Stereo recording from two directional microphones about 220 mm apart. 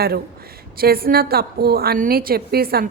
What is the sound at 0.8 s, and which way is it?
Speech, 45° right (ahead or behind).